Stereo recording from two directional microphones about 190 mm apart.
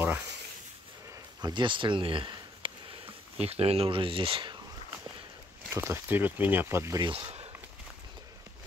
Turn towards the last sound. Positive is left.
turn(degrees=-35)  # may be behind; listen again after turning